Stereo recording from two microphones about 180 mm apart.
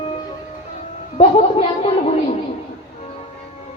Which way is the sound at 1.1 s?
30° left (ahead or behind).